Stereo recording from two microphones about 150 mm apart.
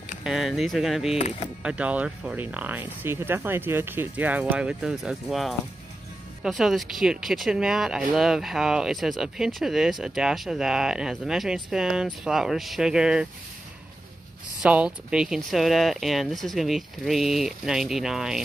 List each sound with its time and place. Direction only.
0.2 s speech: 5° right (ahead or behind)
1.1 s speech: 45° left (ahead or behind)
1.6 s speech: 10° right (ahead or behind)
14.6 s speech: 10° right (ahead or behind)